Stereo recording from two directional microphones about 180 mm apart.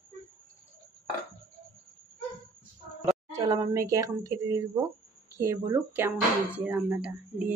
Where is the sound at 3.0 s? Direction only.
20° right (ahead or behind).